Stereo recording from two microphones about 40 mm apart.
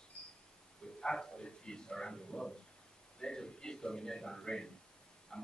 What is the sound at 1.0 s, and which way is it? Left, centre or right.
A man's voice, centre.